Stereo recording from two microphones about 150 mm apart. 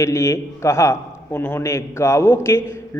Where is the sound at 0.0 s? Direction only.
20° left (ahead or behind).